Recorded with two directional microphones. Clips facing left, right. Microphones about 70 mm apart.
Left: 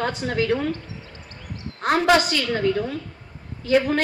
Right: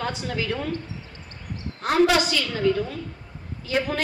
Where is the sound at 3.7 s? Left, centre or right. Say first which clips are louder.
Left 6 dB; left.